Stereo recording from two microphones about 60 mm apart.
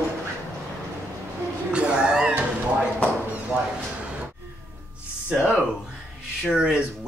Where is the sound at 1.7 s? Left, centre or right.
Centre.